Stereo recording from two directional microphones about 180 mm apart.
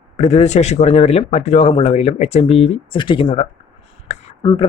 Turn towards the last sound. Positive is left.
turn(degrees=25)  # may be behind; listen again after turning